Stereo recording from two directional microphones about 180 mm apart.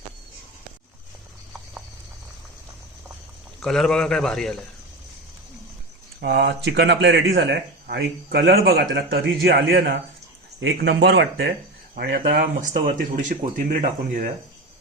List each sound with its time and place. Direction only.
3.6 s a man's voice: 5° left (ahead or behind)
6.1 s speech: 65° right (ahead or behind); by 13.7 s 45° right (ahead or behind)